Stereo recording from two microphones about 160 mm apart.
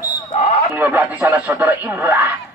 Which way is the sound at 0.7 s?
10° right (ahead or behind).